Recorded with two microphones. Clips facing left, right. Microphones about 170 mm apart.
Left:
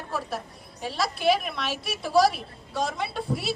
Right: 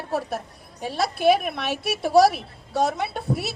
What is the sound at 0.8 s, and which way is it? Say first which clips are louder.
A woman's voice: right 4 dB; 50° right (ahead or behind).